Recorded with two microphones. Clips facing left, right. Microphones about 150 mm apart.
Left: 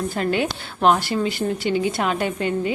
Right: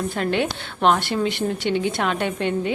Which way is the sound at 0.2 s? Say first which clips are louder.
Left 1 dB; centre (ahead or behind).